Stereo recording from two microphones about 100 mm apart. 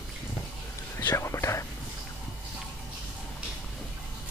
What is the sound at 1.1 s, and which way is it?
Speech, 30° left (ahead or behind).